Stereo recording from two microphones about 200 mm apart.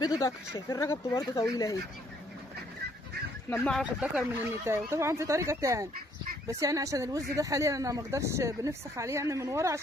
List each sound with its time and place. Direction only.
0.2 s speech: 15° left (ahead or behind)
3.4 s speech: 10° left (ahead or behind)
3.8 s speech: 5° right (ahead or behind)